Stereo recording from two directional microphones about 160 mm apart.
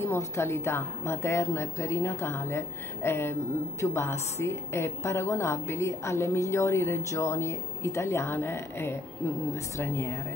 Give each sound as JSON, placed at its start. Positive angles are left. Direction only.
{"t": 0.0, "sound": "a woman's voice", "side_deg": 15}